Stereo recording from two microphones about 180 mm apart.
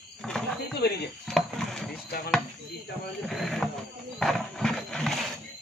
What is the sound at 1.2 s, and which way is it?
Wood, centre (ahead or behind).